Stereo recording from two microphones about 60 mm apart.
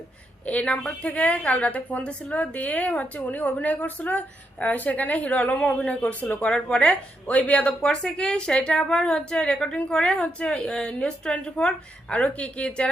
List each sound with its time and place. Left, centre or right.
0.4 s a woman's voice: left